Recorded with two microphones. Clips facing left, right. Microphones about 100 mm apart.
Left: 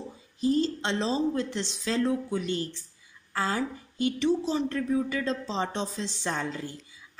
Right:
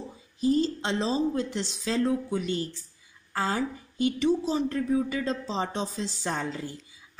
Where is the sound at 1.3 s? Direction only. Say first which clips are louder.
Right 1 dB; 10° right (ahead or behind).